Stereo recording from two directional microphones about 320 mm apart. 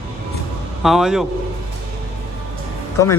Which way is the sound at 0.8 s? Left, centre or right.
Centre.